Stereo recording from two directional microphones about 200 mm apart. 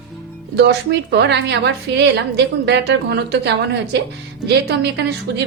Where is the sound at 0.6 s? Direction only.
60° right (ahead or behind).